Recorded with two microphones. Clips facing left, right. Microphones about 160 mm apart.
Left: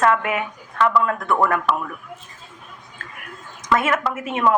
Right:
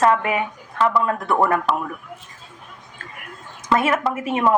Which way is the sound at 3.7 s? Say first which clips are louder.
Right 1 dB; 30° right (ahead or behind).